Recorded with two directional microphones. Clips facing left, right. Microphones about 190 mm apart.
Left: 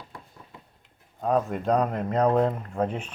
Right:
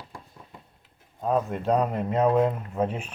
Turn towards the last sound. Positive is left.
turn(degrees=-5)  # may be behind; listen again after turning